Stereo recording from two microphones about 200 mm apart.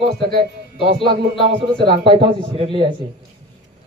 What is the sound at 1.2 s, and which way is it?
Speech, 55° right (ahead or behind).